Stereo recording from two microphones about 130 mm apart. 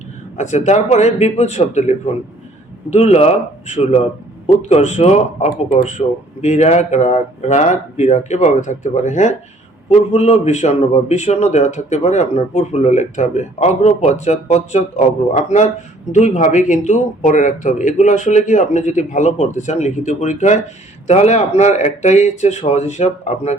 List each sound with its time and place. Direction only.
0.3 s speech: 65° left (ahead or behind)
9.9 s speech: 55° left (ahead or behind)